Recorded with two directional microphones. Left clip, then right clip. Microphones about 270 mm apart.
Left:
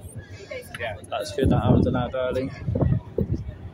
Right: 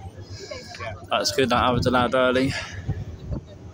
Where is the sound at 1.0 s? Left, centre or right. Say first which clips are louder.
Right 5 dB; centre.